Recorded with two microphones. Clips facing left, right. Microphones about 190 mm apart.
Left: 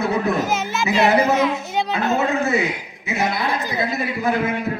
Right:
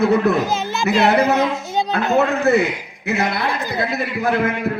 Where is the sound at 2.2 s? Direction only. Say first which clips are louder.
Right 7 dB; 65° right (ahead or behind).